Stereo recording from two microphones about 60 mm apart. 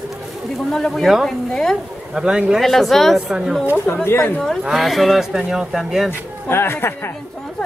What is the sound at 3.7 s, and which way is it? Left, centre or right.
Speech, left.